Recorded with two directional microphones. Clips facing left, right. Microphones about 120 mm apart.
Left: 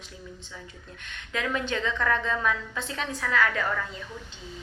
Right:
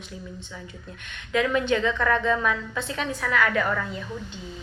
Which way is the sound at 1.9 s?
35° right (ahead or behind).